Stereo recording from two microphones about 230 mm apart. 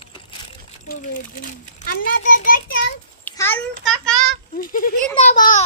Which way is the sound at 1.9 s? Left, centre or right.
Left.